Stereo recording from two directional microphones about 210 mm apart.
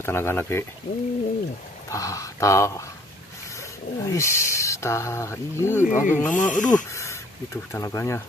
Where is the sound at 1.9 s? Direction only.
15° left (ahead or behind).